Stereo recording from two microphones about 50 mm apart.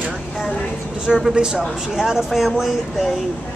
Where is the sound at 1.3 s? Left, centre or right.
Centre.